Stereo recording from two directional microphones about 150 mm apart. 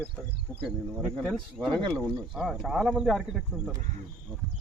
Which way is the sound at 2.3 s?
Centre (ahead or behind).